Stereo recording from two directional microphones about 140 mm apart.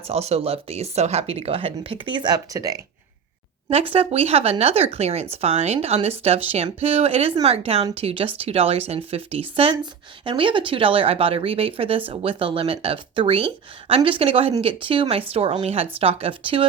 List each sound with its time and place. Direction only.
0.1 s speech: 50° right (ahead or behind); by 2.8 s 25° right (ahead or behind)
3.7 s speech: 45° right (ahead or behind)